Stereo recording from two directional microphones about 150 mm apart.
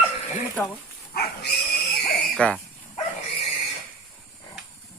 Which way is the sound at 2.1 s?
5° left (ahead or behind).